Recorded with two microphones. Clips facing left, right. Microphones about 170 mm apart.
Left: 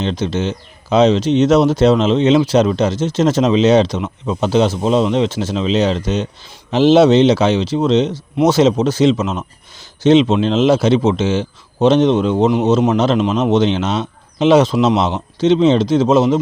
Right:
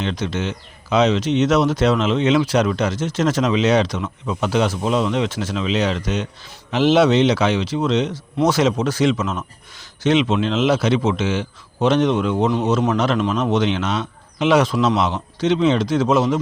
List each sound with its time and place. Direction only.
0.0 s speech: 30° left (ahead or behind)